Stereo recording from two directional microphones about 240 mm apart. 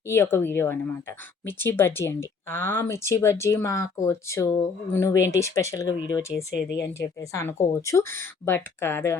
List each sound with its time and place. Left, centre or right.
0.1 s speech: centre
6.7 s a woman's voice: left
7.0 s speech: centre